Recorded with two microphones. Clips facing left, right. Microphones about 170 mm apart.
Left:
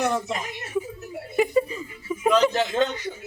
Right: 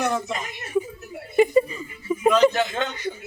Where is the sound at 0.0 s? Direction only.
15° left (ahead or behind).